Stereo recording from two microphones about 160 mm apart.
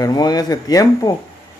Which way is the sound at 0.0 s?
25° left (ahead or behind).